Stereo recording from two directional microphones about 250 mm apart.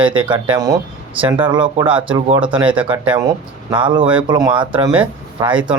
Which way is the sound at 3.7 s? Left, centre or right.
Centre.